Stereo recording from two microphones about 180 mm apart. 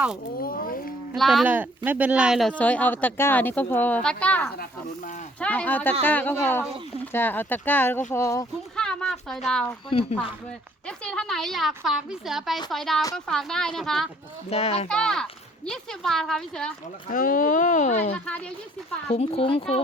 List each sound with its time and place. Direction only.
0.3 s speech: 55° left (ahead or behind)
1.1 s speech: centre (ahead or behind)
2.5 s speech: 5° left (ahead or behind)
4.5 s speech: 55° left (ahead or behind)
5.4 s speech: 10° left (ahead or behind)
8.7 s speech: 5° left (ahead or behind)
9.9 s speech: 35° left (ahead or behind)
10.8 s speech: 5° left (ahead or behind)
14.5 s speech: 35° left (ahead or behind)
14.8 s speech: 5° left (ahead or behind)
17.1 s speech: 50° left (ahead or behind)
18.1 s speech: 10° left (ahead or behind)
19.1 s speech: 35° left (ahead or behind)